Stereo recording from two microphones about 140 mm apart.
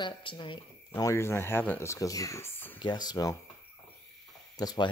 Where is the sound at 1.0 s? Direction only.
20° left (ahead or behind).